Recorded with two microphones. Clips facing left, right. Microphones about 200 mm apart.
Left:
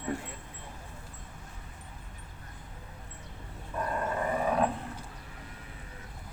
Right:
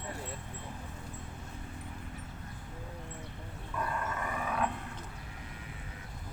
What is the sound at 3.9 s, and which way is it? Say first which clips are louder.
Dog: left 10 dB; 30° left (ahead or behind).